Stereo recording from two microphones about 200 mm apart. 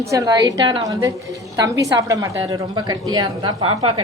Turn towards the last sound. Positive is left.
turn(degrees=-25)  # may be behind; listen again after turning